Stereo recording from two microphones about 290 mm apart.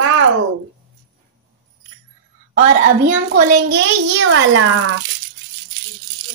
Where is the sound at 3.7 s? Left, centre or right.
Right.